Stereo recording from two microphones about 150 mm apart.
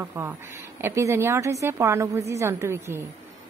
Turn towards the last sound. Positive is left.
turn(degrees=-15)  # may be behind; listen again after turning